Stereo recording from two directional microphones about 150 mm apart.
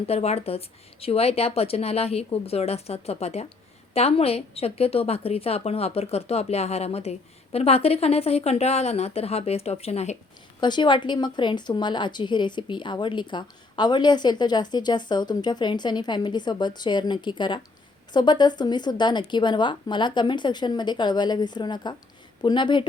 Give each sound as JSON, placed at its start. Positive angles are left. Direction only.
{"t": 0.1, "sound": "a woman's voice", "side_deg": 45}
{"t": 10.6, "sound": "a woman's voice", "side_deg": 30}